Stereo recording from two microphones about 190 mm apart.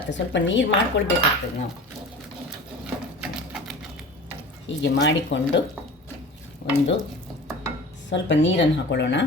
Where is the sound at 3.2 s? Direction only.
Centre (ahead or behind).